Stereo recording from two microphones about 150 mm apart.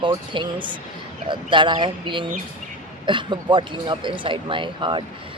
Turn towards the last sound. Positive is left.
turn(degrees=-35)  # may be behind; listen again after turning